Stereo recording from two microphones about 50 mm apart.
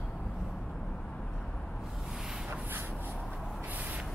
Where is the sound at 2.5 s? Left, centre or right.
Right.